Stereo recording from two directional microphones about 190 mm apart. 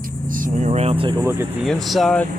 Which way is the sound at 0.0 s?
45° right (ahead or behind).